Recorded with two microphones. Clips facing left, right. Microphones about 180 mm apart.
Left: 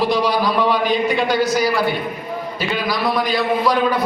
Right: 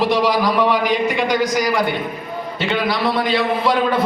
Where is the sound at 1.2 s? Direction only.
20° right (ahead or behind).